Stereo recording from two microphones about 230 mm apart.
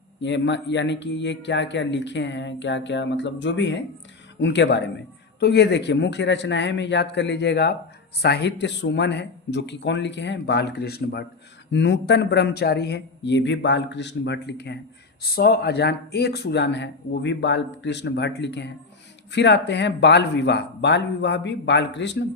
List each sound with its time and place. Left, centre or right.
0.2 s speech: left